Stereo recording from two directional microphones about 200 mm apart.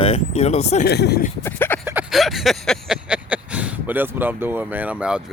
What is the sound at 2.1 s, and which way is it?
Speech, centre (ahead or behind).